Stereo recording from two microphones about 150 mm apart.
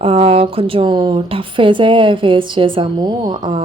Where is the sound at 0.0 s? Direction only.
40° right (ahead or behind).